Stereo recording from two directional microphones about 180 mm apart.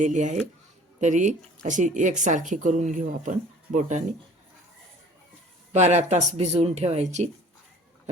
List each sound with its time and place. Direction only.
0.0 s speech: 40° right (ahead or behind)
5.7 s speech: 40° right (ahead or behind)